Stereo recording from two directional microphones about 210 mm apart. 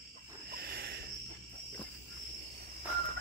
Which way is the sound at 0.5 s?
50° right (ahead or behind).